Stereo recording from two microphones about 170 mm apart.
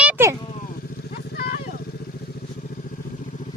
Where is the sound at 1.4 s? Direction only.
65° left (ahead or behind).